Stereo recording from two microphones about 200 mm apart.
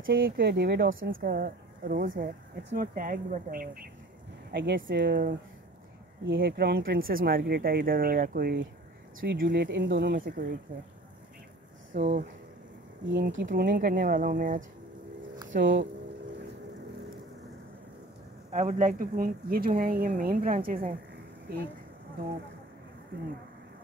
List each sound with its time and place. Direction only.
0.0 s speech: 50° right (ahead or behind); by 1.1 s 65° right (ahead or behind)
1.1 s speech: 50° right (ahead or behind)
11.9 s speech: 40° right (ahead or behind)
13.1 s speech: 60° right (ahead or behind); by 14.6 s 40° right (ahead or behind)
18.5 s speech: 40° right (ahead or behind)